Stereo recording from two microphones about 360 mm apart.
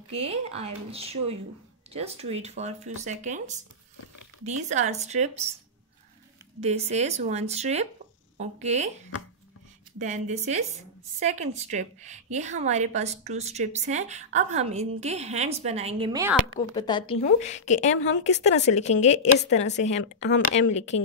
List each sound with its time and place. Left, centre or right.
0.1 s a woman's voice: centre
6.6 s a woman's voice: centre
9.9 s a woman's voice: centre
16.5 s a woman's voice: centre
20.0 s speech: left